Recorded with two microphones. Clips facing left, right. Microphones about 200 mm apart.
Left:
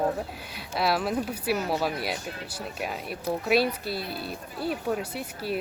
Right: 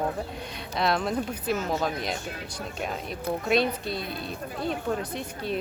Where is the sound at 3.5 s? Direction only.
5° left (ahead or behind).